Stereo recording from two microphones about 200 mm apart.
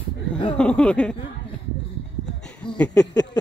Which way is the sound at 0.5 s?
5° left (ahead or behind).